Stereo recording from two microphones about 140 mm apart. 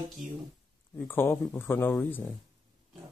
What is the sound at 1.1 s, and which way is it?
Speech, 15° left (ahead or behind).